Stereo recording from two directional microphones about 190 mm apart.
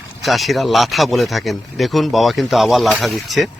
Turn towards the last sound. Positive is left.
turn(degrees=0)  # may be behind; listen again after turning